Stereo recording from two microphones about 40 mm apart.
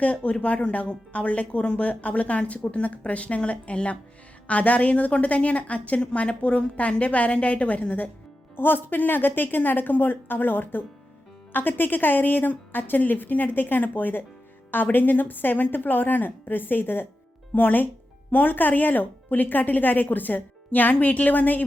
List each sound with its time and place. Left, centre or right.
0.0 s speech: left
8.5 s a woman's voice: left